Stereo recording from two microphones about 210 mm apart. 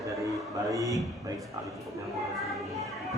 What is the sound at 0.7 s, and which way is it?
Speech, 15° right (ahead or behind).